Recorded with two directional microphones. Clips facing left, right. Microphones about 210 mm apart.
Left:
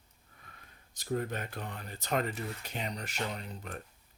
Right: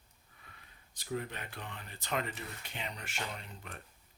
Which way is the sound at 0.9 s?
45° left (ahead or behind).